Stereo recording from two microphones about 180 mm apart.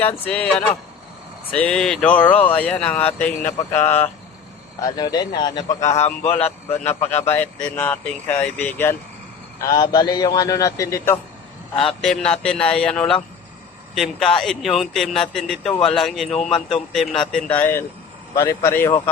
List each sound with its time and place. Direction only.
0.0 s speech: 10° left (ahead or behind)
1.5 s speech: 5° left (ahead or behind)
4.9 s a man's voice: 20° left (ahead or behind)
5.9 s a man's voice: 40° left (ahead or behind)
6.7 s speech: 10° left (ahead or behind)
7.1 s a man's voice: 35° left (ahead or behind)
7.3 s a man's voice: 10° left (ahead or behind)
12.4 s speech: 5° left (ahead or behind)
17.3 s speech: 10° left (ahead or behind)